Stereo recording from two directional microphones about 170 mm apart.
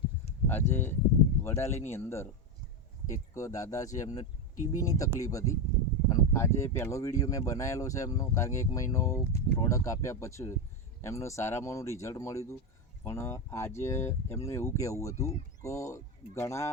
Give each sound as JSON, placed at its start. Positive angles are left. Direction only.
{"t": 0.4, "sound": "speech", "side_deg": 15}
{"t": 3.3, "sound": "speech", "side_deg": 20}